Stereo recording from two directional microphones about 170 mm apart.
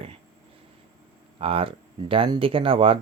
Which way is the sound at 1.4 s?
35° right (ahead or behind).